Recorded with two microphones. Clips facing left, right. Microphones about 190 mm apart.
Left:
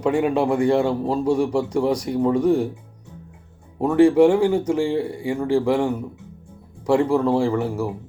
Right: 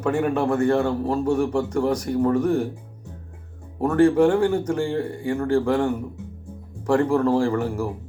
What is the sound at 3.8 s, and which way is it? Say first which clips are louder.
Speech: left 3 dB; 10° left (ahead or behind).